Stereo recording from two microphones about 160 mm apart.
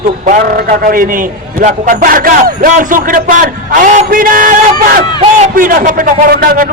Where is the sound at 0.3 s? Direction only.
55° right (ahead or behind).